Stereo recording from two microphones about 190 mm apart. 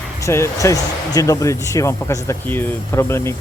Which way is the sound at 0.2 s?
15° left (ahead or behind).